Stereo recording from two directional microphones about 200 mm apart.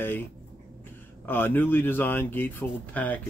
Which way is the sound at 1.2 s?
10° left (ahead or behind).